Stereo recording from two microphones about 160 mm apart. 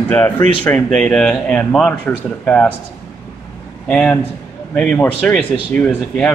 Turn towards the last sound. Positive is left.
turn(degrees=5)  # may be behind; listen again after turning